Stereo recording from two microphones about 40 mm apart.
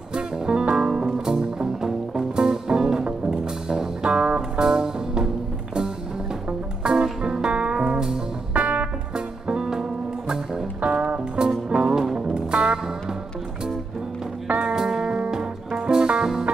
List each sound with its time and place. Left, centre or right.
0.1 s music: right
6.8 s music: right
8.5 s music: right
10.8 s music: right
14.6 s music: centre